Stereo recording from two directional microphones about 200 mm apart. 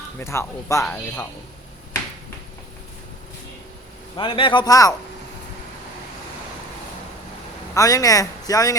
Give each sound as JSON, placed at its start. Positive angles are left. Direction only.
{"t": 0.2, "sound": "speech", "side_deg": 15}
{"t": 4.2, "sound": "a man's voice", "side_deg": 25}
{"t": 7.7, "sound": "speech", "side_deg": 15}